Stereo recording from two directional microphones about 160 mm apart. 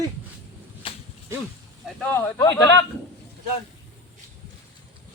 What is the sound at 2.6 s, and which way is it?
Speech, 25° left (ahead or behind).